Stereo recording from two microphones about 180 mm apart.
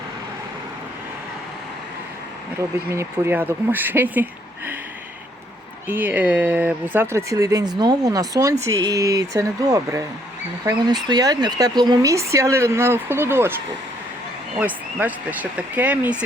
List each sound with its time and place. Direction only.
2.6 s speech: 15° right (ahead or behind)
5.9 s speech: 10° right (ahead or behind)
14.6 s speech: 10° right (ahead or behind)